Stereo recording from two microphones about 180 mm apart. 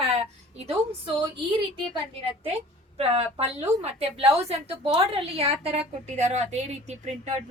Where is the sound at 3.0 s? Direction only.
35° right (ahead or behind).